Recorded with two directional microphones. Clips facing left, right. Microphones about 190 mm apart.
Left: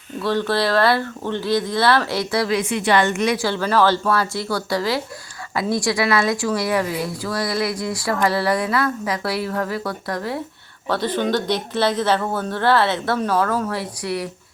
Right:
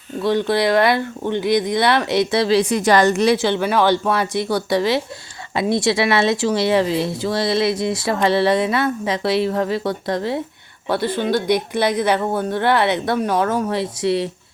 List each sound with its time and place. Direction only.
0.2 s speech: 15° right (ahead or behind); by 3.3 s 35° right (ahead or behind)
3.3 s speech: 20° right (ahead or behind)
10.8 s speech: 10° right (ahead or behind)